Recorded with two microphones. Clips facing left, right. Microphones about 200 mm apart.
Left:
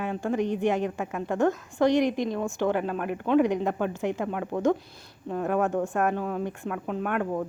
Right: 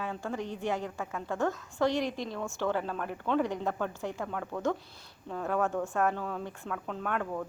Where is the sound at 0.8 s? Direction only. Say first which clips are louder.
Left 6 dB; 65° left (ahead or behind).